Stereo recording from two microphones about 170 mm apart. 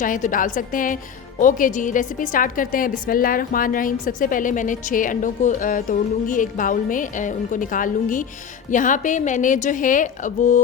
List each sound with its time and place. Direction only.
0.0 s a woman's voice: 50° left (ahead or behind)